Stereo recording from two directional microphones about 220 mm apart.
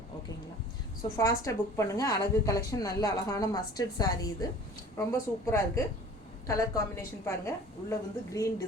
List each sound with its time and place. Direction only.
1.5 s a woman's voice: 15° left (ahead or behind)